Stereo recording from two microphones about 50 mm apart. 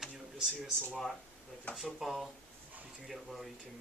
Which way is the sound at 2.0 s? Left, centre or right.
Centre.